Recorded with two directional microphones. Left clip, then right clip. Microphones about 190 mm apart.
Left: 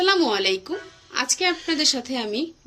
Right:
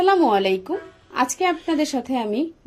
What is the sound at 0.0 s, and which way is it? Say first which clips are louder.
A woman's voice: right 3 dB; 35° right (ahead or behind).